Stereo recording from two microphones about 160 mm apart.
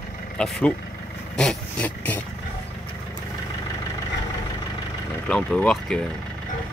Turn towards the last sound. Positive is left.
turn(degrees=5)  # may be behind; listen again after turning